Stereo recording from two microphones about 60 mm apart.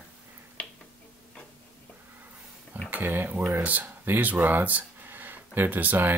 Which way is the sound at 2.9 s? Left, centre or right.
Right.